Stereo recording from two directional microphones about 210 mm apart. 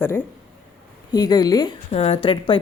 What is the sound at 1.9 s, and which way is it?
Speech, 30° left (ahead or behind).